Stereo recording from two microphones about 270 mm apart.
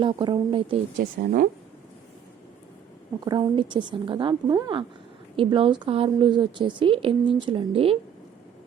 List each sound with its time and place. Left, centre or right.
0.0 s speech: centre
0.9 s a woman's voice: right
3.2 s a woman's voice: centre